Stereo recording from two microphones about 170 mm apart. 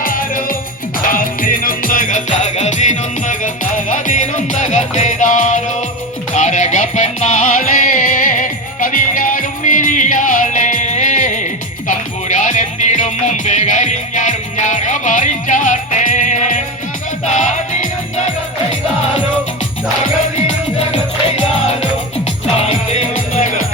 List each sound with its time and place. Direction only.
0.0 s music: 55° left (ahead or behind)
20.7 s music: 40° left (ahead or behind)